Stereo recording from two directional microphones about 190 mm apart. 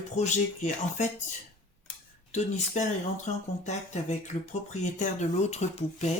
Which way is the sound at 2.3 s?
35° left (ahead or behind).